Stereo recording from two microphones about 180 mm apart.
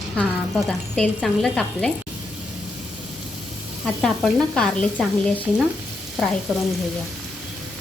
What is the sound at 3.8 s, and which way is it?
Speech, centre (ahead or behind).